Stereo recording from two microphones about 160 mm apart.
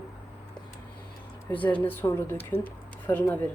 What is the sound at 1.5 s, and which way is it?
A woman's voice, 10° left (ahead or behind).